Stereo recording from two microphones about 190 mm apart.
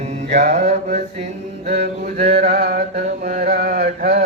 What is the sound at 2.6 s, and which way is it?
Mantra, 55° right (ahead or behind).